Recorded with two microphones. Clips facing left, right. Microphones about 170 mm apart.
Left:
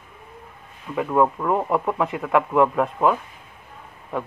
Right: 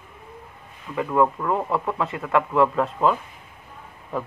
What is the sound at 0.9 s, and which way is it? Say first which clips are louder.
Speech: left 1 dB; 10° left (ahead or behind).